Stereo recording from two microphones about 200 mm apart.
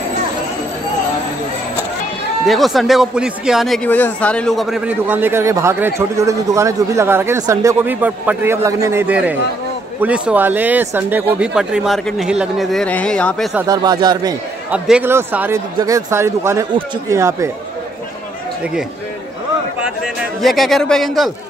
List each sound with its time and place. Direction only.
2.4 s a man's voice: centre (ahead or behind)
13.7 s speech: 20° right (ahead or behind)
14.7 s a man's voice: 5° right (ahead or behind)
19.8 s speech: centre (ahead or behind)